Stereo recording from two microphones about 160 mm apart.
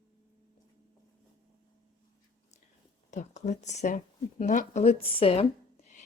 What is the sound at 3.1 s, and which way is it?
A woman's voice, 50° left (ahead or behind).